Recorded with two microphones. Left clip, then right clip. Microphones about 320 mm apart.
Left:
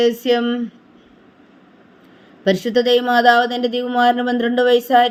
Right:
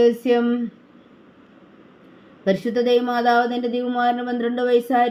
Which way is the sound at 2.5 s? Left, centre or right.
Left.